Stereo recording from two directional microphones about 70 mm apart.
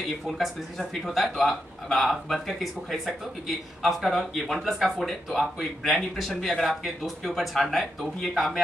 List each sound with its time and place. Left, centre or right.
0.4 s speech: centre